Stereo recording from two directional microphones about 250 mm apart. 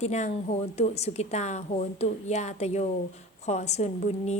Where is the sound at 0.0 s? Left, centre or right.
Left.